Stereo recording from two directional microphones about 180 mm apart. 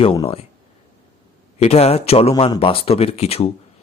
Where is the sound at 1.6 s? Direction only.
35° left (ahead or behind).